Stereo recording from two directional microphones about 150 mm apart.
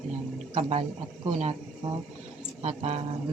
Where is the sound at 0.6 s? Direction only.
45° right (ahead or behind).